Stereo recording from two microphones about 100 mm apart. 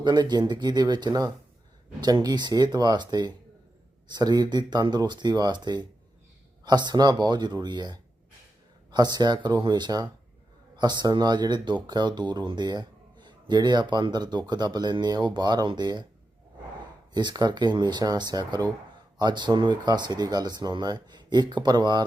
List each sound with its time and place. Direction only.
0.0 s speech: 45° right (ahead or behind)
17.2 s speech: 45° right (ahead or behind)